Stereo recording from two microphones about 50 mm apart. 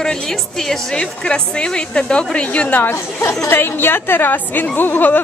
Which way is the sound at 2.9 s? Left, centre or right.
Left.